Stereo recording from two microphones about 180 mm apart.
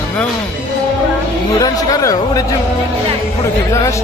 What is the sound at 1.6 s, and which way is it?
Speech, 20° left (ahead or behind).